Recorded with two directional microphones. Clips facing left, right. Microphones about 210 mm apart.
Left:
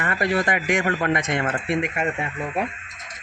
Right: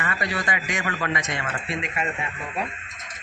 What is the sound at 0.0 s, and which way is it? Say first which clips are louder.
Speech: left 6 dB; 50° left (ahead or behind).